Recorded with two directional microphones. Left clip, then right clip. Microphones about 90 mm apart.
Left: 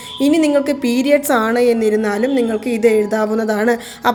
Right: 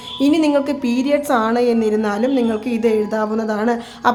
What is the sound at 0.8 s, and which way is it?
Speech, 30° left (ahead or behind).